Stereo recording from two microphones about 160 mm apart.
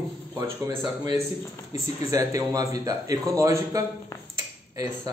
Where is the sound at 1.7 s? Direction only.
20° right (ahead or behind).